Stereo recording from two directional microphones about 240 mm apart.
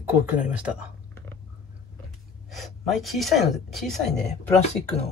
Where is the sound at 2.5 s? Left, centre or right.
Centre.